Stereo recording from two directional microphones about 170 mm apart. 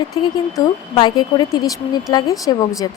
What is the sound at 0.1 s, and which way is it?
A woman's voice, 25° left (ahead or behind).